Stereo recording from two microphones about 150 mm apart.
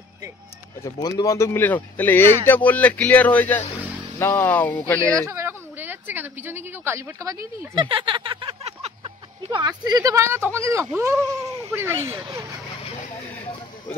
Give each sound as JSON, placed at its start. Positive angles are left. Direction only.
{"t": 0.8, "sound": "speech", "side_deg": 25}
{"t": 5.3, "sound": "speech", "side_deg": -15}
{"t": 7.7, "sound": "speech", "side_deg": -30}